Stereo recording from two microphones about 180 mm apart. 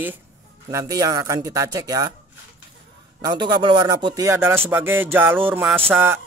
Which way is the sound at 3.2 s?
25° right (ahead or behind).